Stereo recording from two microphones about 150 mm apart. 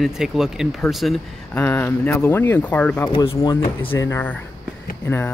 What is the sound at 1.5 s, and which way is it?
Speech, 15° left (ahead or behind).